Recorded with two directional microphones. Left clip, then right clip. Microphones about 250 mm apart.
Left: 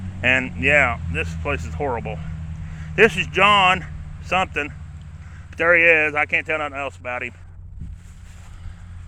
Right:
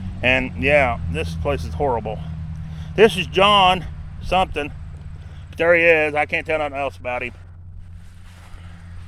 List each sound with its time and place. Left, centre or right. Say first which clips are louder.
0.2 s speech: even; centre